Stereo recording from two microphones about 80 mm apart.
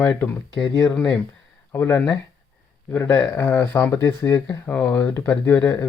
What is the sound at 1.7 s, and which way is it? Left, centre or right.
Speech, left.